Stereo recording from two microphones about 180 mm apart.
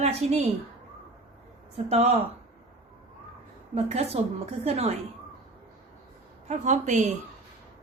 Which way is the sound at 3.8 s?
35° right (ahead or behind).